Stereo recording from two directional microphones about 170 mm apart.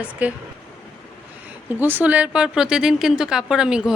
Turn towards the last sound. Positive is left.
turn(degrees=-5)  # may be behind; listen again after turning